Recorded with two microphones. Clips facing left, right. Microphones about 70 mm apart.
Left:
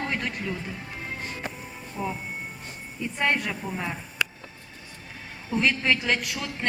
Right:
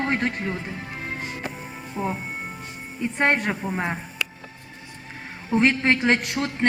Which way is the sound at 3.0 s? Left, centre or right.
Right.